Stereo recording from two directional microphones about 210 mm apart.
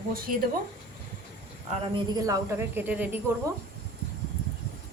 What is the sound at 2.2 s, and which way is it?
Speech, 15° right (ahead or behind).